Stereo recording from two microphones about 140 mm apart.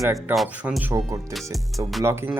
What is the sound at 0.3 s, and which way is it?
Speech, centre (ahead or behind).